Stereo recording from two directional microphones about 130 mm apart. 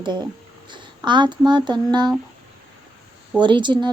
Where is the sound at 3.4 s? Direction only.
35° right (ahead or behind).